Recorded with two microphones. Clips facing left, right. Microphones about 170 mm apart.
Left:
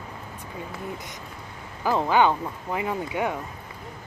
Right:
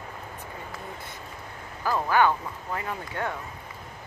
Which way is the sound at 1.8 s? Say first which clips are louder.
Left 2 dB; 20° left (ahead or behind).